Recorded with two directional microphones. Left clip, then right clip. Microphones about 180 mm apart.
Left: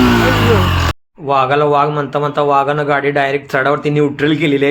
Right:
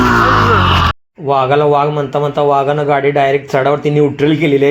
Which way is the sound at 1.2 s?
15° right (ahead or behind).